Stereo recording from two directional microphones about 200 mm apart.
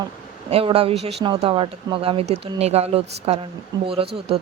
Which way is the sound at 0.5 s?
30° right (ahead or behind).